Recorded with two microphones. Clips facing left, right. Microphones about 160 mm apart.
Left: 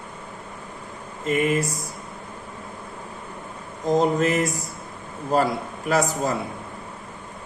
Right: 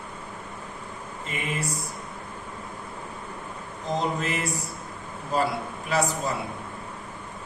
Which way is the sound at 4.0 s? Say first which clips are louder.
Left 8 dB; 45° left (ahead or behind).